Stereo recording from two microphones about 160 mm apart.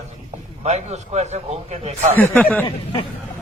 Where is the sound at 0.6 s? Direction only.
40° right (ahead or behind).